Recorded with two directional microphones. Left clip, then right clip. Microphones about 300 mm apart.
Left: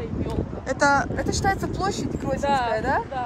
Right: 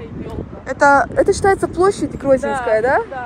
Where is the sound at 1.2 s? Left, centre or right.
Centre.